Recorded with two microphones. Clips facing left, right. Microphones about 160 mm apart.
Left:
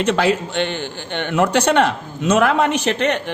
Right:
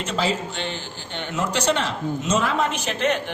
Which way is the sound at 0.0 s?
65° left (ahead or behind).